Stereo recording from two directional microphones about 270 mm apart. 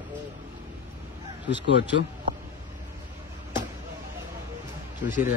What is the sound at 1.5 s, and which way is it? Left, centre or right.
Speech, left.